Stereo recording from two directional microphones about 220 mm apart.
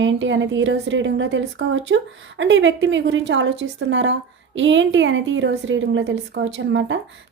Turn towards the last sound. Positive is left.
turn(degrees=-55)  # may be behind; listen again after turning